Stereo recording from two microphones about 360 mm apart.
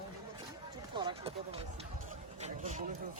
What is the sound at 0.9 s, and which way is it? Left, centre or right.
Speech, centre.